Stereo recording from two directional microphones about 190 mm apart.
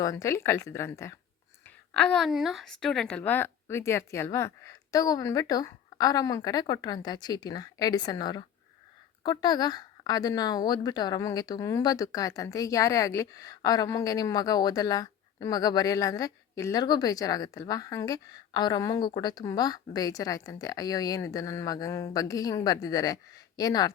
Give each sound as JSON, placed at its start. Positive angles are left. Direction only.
{"t": 0.0, "sound": "a woman's voice", "side_deg": 15}